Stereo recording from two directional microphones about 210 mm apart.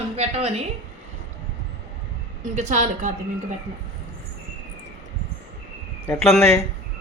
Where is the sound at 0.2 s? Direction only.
30° right (ahead or behind).